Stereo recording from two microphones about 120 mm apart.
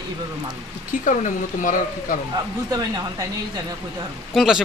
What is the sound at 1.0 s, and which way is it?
Speech, 90° left.